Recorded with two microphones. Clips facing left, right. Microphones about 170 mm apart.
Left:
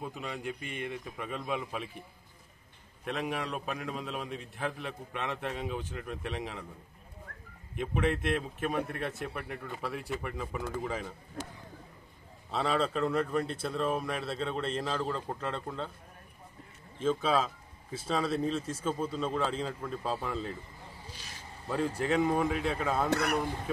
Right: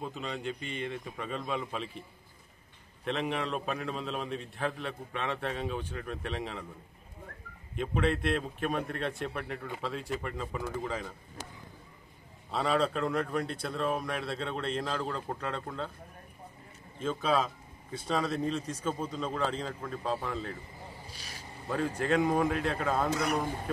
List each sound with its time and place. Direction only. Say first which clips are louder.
0.0 s a man's voice: right 1 dB; 10° left (ahead or behind)
3.1 s a man's voice: right 2 dB; 5° left (ahead or behind)
7.7 s a man's voice: right 1 dB; 15° left (ahead or behind)
12.4 s speech: right 1 dB; centre (ahead or behind)
17.0 s speech: left 1 dB; centre (ahead or behind)
22.0 s speech: right 1 dB; 5° left (ahead or behind)
23.1 s a man's voice: left 1 dB; 65° left (ahead or behind)